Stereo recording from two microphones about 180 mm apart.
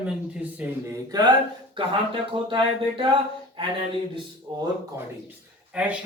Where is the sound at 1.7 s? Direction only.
30° right (ahead or behind).